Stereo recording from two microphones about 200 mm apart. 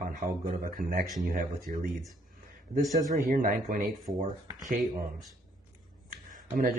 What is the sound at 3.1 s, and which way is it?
Speech, 45° right (ahead or behind).